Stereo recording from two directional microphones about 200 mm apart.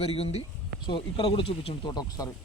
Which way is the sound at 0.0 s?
30° left (ahead or behind).